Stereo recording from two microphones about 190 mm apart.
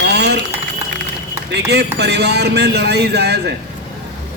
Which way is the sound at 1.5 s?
60° right (ahead or behind).